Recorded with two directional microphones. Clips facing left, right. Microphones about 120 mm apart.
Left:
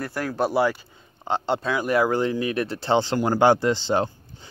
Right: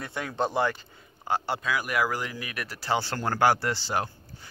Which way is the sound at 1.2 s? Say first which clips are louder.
Left 4 dB; 20° left (ahead or behind).